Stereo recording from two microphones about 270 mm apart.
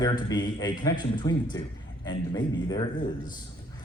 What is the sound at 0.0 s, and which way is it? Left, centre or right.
A man's voice, centre.